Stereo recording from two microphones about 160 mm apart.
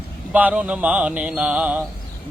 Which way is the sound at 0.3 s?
10° right (ahead or behind).